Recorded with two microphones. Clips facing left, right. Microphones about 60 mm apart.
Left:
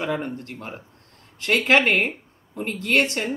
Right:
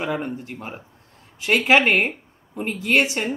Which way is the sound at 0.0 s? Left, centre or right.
Centre.